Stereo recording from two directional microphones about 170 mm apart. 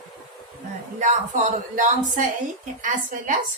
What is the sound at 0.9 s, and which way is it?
Speech, 45° right (ahead or behind).